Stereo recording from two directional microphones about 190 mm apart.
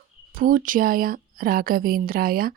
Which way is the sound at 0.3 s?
45° right (ahead or behind).